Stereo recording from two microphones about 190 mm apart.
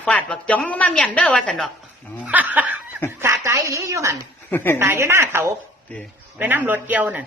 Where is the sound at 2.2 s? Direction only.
10° right (ahead or behind).